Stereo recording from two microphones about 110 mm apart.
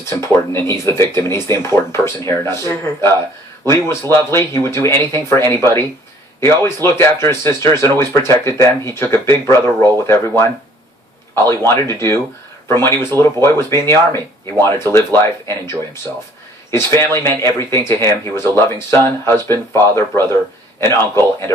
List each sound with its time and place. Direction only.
0.2 s speech: 25° left (ahead or behind)
16.7 s speech: 25° left (ahead or behind)